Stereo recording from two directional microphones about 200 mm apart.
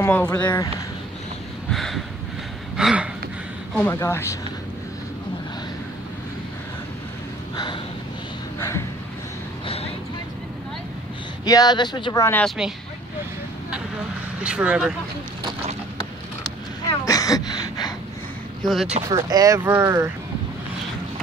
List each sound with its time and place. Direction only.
0.0 s speech: 10° left (ahead or behind)
1.7 s a sound: centre (ahead or behind)
3.7 s speech: 10° left (ahead or behind)
7.5 s a sound: 20° left (ahead or behind)
8.5 s speech: 15° left (ahead or behind)
9.7 s vehicle: 30° left (ahead or behind)
11.4 s speech: 20° left (ahead or behind)
14.4 s speech: 5° right (ahead or behind)
17.0 s gasp: 20° left (ahead or behind)
18.6 s speech: centre (ahead or behind)
19.0 s speech: 20° right (ahead or behind)